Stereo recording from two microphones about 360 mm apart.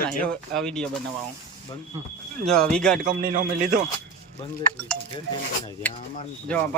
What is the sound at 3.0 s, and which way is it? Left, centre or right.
Speech, right.